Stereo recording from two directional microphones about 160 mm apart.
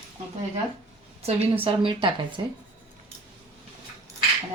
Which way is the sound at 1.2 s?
35° right (ahead or behind).